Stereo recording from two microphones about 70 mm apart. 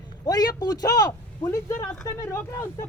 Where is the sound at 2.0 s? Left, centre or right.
Left.